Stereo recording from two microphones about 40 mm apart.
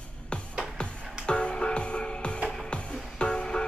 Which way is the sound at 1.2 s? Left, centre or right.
Left.